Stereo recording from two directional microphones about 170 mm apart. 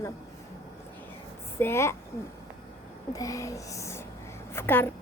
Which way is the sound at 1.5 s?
15° left (ahead or behind).